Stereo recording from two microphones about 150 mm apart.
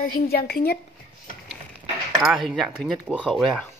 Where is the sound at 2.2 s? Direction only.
Centre (ahead or behind).